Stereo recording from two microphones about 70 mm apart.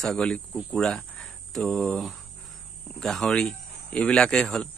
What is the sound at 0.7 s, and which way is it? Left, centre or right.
Speech, centre.